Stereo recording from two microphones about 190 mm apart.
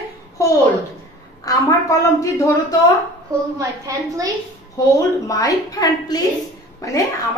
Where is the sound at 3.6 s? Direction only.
20° right (ahead or behind).